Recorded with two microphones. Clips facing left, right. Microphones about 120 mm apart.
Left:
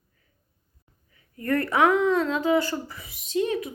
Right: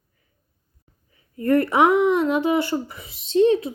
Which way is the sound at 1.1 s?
25° right (ahead or behind).